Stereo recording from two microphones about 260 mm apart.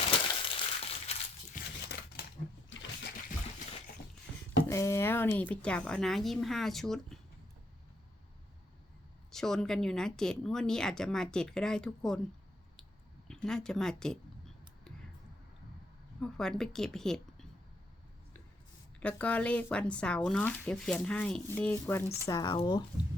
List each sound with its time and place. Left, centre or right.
0.0 s a sound: left
1.5 s crumpling: left
2.6 s a sound: left
4.7 s speech: centre
9.3 s speech: centre
13.2 s speech: centre
16.2 s speech: centre
18.9 s speech: centre